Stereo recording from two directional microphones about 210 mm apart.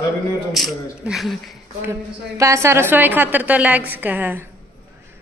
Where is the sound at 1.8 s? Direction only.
15° right (ahead or behind).